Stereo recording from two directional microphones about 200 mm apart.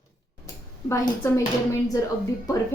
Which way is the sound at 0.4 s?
15° left (ahead or behind).